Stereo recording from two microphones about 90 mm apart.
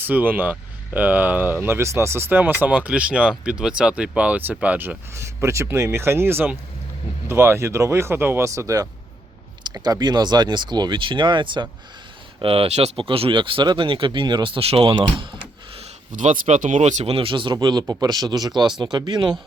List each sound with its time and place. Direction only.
0.0 s speech: 20° right (ahead or behind)
2.6 s speech: 15° right (ahead or behind)
5.1 s speech: 30° right (ahead or behind)
8.4 s speech: 35° right (ahead or behind); by 11.7 s 60° right (ahead or behind)
12.4 s speech: 80° right
14.8 s speech: 60° right (ahead or behind)
17.1 s speech: 85° right; by 19.4 s 55° right (ahead or behind)